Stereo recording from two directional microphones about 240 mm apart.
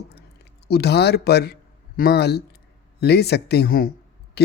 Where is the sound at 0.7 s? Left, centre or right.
Left.